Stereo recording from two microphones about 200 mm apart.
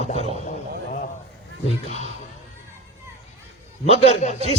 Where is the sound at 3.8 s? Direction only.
30° left (ahead or behind).